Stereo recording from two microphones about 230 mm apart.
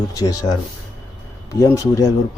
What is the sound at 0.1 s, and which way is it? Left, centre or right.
Speech, centre.